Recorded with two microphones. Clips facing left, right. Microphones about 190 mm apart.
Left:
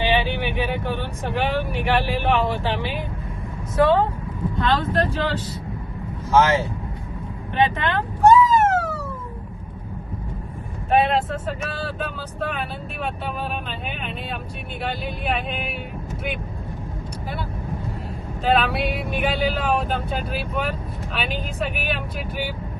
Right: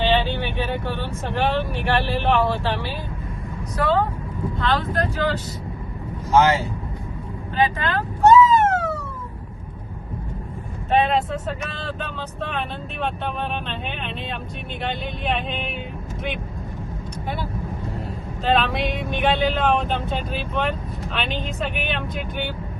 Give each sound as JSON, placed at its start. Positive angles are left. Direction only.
{"t": 0.0, "sound": "speech", "side_deg": 15}
{"t": 7.5, "sound": "speech", "side_deg": 25}
{"t": 8.2, "sound": "cat", "side_deg": 10}
{"t": 11.0, "sound": "speech", "side_deg": 5}
{"t": 18.4, "sound": "speech", "side_deg": 5}